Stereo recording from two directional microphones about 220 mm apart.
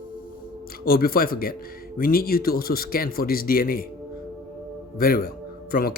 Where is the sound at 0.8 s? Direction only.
40° left (ahead or behind).